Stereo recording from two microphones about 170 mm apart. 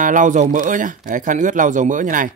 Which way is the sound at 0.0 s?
50° right (ahead or behind).